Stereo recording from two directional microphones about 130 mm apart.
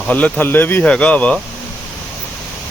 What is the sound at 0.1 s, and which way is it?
Speech, 10° left (ahead or behind).